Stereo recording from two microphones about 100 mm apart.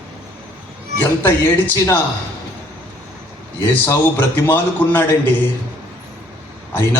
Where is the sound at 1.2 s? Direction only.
20° left (ahead or behind).